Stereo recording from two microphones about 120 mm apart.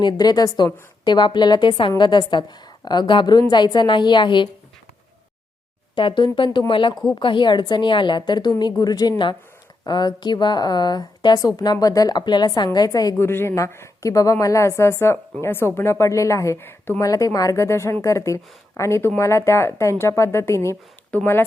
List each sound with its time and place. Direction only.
0.0 s a woman's voice: 35° left (ahead or behind)
6.0 s speech: 45° left (ahead or behind)
6.9 s speech: centre (ahead or behind)
7.2 s a woman's voice: 40° left (ahead or behind)
13.2 s a woman's voice: 20° left (ahead or behind)
21.1 s speech: 10° left (ahead or behind)